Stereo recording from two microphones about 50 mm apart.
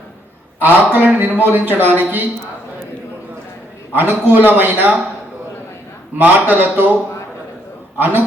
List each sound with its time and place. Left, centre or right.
0.6 s a man's voice: right
3.9 s a man's voice: right
6.1 s a man's voice: right
7.9 s a man's voice: right